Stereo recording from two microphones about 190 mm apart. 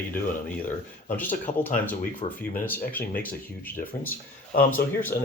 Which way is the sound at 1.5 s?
35° left (ahead or behind).